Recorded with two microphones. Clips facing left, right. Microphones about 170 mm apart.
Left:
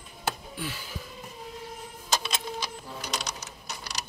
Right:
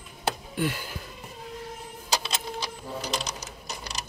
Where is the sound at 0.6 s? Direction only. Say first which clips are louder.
Right 8 dB; 60° right (ahead or behind).